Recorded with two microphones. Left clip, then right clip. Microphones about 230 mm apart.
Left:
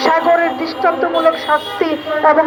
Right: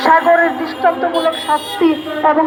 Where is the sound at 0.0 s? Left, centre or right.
Left.